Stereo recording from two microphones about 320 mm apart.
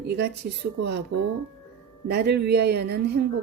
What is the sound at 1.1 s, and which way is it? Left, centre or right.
A woman's voice, right.